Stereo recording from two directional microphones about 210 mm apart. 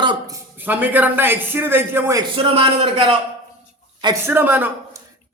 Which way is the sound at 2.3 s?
25° right (ahead or behind).